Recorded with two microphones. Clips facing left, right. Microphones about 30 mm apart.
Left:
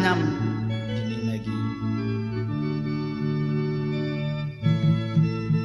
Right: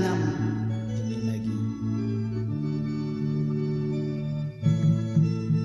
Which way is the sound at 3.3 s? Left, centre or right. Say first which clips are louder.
Left 3 dB; left.